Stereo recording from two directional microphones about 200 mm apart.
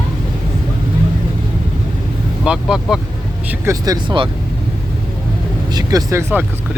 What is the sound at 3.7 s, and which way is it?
Speech, 20° right (ahead or behind).